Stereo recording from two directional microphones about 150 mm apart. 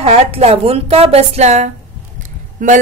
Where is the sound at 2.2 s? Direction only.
60° right (ahead or behind).